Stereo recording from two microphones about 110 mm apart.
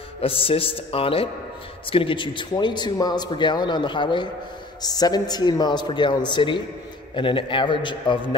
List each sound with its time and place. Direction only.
0.2 s a man's voice: 55° left (ahead or behind)